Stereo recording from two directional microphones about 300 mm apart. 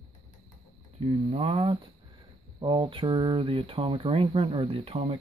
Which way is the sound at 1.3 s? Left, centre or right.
Right.